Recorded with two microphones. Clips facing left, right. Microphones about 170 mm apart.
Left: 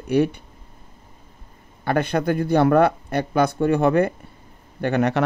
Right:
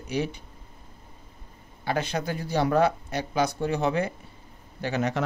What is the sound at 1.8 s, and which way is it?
Speech, 55° left (ahead or behind).